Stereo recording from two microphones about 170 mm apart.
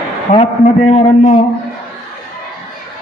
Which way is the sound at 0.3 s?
40° left (ahead or behind).